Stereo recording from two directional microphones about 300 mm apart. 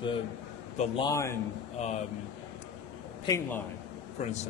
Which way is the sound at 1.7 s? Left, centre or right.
Left.